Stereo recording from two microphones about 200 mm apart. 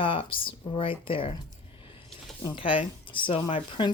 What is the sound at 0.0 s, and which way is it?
Speech, 25° left (ahead or behind).